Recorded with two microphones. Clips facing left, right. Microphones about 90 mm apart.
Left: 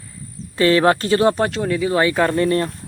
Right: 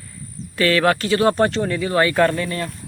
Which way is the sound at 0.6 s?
30° left (ahead or behind).